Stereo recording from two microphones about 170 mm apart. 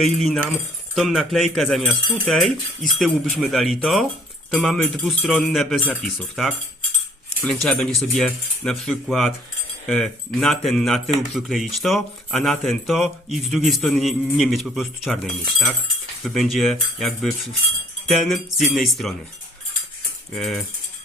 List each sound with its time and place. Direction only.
0.0 s a man's voice: centre (ahead or behind)
20.3 s a man's voice: centre (ahead or behind)